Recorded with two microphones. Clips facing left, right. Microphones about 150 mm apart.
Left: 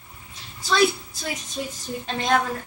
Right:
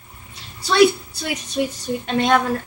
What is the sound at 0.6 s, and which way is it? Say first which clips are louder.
A woman's voice: right 6 dB; 70° right (ahead or behind).